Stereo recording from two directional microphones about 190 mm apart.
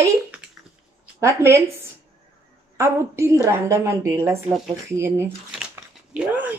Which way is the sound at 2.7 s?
15° right (ahead or behind).